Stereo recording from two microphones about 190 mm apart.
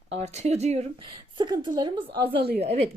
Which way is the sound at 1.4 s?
25° right (ahead or behind).